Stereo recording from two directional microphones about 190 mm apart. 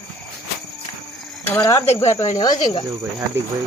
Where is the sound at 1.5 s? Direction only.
15° left (ahead or behind).